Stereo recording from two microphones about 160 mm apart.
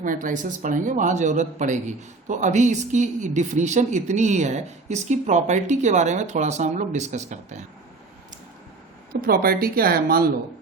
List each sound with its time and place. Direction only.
0.0 s speech: 55° right (ahead or behind)
9.2 s speech: 65° right (ahead or behind)